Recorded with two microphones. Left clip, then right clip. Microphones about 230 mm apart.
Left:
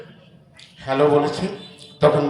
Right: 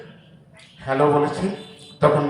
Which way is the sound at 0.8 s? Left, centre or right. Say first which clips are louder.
Left 1 dB; left.